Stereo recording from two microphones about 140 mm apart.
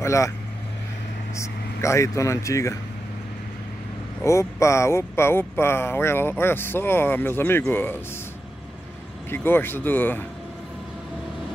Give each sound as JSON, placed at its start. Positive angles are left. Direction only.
{"t": 0.0, "sound": "speech", "side_deg": 20}
{"t": 1.3, "sound": "speech", "side_deg": 20}
{"t": 4.2, "sound": "speech", "side_deg": 20}
{"t": 9.3, "sound": "speech", "side_deg": 15}